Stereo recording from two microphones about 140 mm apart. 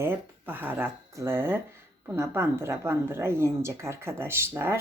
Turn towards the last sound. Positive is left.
turn(degrees=-15)  # may be behind; listen again after turning